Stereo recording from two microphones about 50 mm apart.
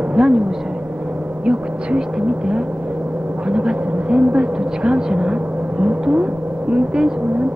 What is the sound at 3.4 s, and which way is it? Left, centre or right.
Speech, centre.